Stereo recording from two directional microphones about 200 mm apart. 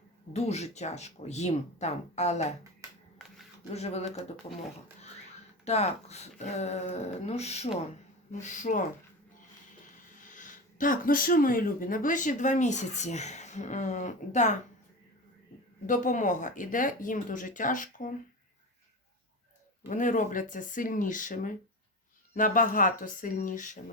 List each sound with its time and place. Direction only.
0.3 s speech: 35° left (ahead or behind)
3.2 s a sound: centre (ahead or behind)
3.7 s speech: 30° left (ahead or behind)
5.6 s speech: 35° left (ahead or behind)
10.2 s speech: 40° left (ahead or behind)
15.9 s speech: 40° left (ahead or behind)
19.9 s speech: 40° left (ahead or behind)